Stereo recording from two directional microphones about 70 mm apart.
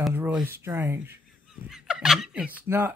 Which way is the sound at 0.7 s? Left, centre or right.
Right.